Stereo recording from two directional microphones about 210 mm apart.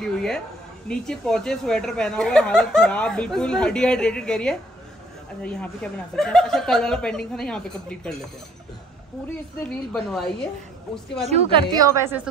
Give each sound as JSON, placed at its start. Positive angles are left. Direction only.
{"t": 0.8, "sound": "speech", "side_deg": 5}
{"t": 9.6, "sound": "speech", "side_deg": 5}
{"t": 11.2, "sound": "a woman's voice", "side_deg": -25}
{"t": 11.7, "sound": "a woman's voice", "side_deg": -15}